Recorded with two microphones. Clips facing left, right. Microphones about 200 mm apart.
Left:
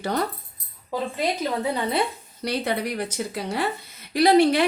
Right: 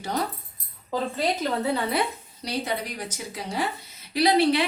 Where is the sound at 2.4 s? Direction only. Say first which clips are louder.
Left 4 dB; 60° left (ahead or behind).